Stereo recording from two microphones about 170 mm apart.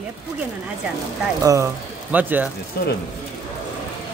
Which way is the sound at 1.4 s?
20° right (ahead or behind).